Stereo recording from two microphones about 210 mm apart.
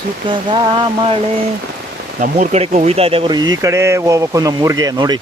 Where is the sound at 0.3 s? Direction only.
25° right (ahead or behind).